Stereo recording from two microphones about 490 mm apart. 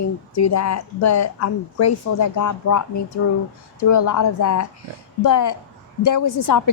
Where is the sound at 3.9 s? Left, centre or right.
Left.